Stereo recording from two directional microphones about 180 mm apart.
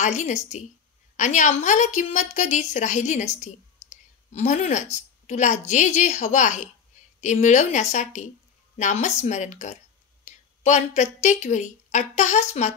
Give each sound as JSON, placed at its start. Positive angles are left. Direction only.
{"t": 0.0, "sound": "a woman's voice", "side_deg": 40}